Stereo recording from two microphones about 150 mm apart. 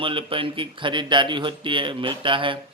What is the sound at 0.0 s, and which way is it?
A man's voice, 35° right (ahead or behind).